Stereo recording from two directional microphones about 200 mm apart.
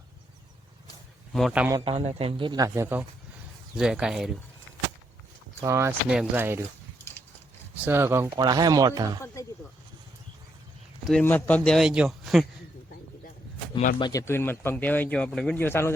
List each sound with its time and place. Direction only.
1.3 s a man's voice: centre (ahead or behind)
1.8 s a man's voice: 30° right (ahead or behind); by 4.4 s 5° right (ahead or behind)
5.6 s speech: 15° right (ahead or behind)
7.9 s speech: 10° right (ahead or behind)
9.2 s a sound: 15° left (ahead or behind)
11.1 s a man's voice: 10° left (ahead or behind)
14.0 s speech: 15° left (ahead or behind)